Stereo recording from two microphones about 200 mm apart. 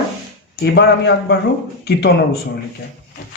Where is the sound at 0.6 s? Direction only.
55° left (ahead or behind).